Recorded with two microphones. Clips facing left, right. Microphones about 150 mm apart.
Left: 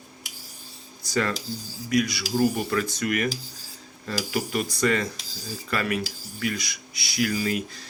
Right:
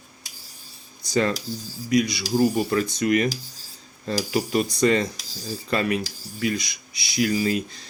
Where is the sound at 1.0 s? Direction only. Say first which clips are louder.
Right 4 dB; 20° right (ahead or behind).